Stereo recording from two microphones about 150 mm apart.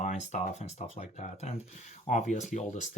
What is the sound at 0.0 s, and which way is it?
Speech, 50° left (ahead or behind).